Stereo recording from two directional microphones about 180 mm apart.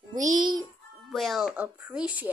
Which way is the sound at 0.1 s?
45° right (ahead or behind).